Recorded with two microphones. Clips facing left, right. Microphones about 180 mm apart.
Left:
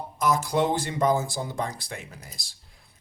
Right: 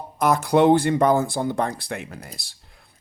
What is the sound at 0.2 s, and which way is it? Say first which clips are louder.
Speech: right 6 dB; 60° right (ahead or behind).